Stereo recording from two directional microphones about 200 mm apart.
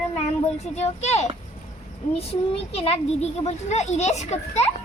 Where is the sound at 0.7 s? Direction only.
35° left (ahead or behind).